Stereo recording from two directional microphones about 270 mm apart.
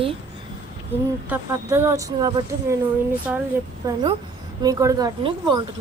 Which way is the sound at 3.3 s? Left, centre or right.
Centre.